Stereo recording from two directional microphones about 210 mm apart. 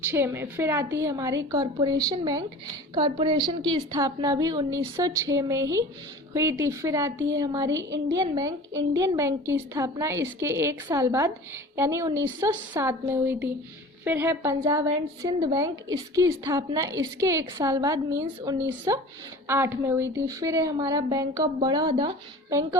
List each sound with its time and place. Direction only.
0.1 s a woman's voice: 10° right (ahead or behind)